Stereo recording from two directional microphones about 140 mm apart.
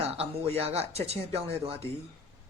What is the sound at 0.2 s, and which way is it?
A woman's voice, 45° right (ahead or behind).